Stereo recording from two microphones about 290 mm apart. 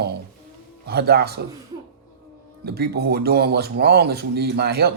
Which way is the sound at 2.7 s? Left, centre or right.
Right.